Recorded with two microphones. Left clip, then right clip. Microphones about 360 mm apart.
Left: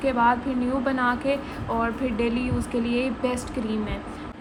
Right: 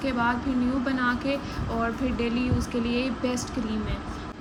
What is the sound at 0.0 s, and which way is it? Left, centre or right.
A woman's voice, centre.